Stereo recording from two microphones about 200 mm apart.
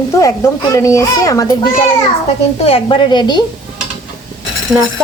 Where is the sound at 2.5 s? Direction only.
30° left (ahead or behind).